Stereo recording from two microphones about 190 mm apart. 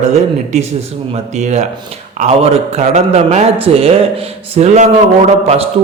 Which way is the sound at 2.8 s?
35° right (ahead or behind).